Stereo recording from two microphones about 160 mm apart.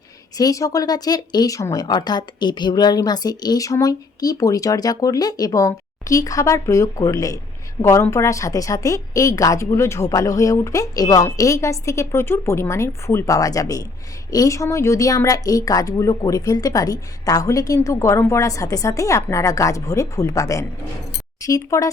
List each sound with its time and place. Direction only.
0.3 s speech: 20° left (ahead or behind)